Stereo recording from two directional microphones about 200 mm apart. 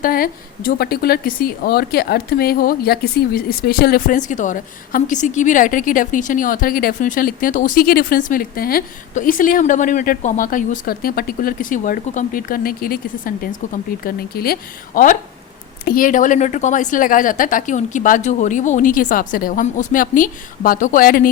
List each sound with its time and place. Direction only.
0.0 s a woman's voice: 45° left (ahead or behind)